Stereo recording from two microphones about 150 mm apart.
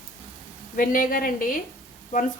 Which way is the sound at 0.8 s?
70° left (ahead or behind).